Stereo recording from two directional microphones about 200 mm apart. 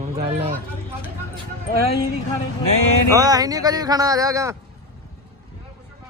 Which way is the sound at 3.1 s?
20° right (ahead or behind).